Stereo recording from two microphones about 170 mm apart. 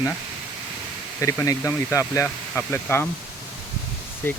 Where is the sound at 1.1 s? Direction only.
15° left (ahead or behind).